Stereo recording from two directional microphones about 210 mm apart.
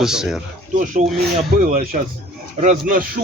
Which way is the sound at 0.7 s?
40° right (ahead or behind).